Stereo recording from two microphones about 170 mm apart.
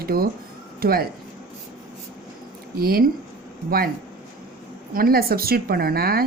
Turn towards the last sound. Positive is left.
turn(degrees=-65)  # may be behind; listen again after turning